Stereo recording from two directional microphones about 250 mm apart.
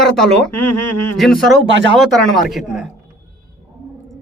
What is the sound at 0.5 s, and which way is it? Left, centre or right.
Speech, left.